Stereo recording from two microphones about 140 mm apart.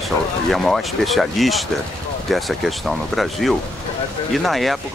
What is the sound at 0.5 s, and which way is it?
Speech, centre (ahead or behind).